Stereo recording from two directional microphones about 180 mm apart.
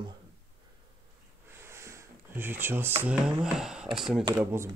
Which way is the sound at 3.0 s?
5° right (ahead or behind).